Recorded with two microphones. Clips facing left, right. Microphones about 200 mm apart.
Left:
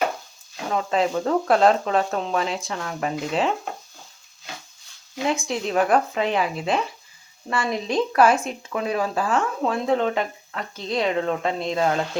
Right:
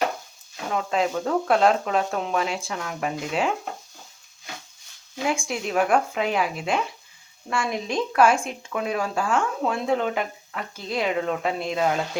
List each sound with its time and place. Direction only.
0.7 s speech: centre (ahead or behind)
5.4 s speech: centre (ahead or behind)